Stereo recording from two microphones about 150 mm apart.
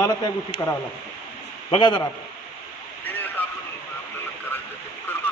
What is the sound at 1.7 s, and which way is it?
Speech, 30° left (ahead or behind).